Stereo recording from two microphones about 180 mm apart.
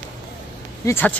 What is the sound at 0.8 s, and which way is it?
Speech, 10° left (ahead or behind).